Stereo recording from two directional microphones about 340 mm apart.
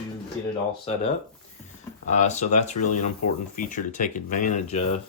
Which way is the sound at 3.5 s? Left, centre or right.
Left.